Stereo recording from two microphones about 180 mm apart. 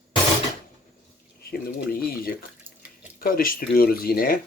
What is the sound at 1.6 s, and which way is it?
Speech, 55° left (ahead or behind).